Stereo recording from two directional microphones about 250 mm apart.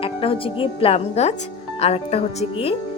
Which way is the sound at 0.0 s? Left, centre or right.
Left.